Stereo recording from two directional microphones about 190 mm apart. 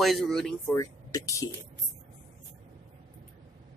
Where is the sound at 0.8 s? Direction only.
15° left (ahead or behind).